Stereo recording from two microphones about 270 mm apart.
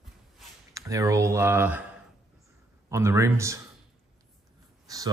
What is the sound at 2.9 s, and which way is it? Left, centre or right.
Speech, centre.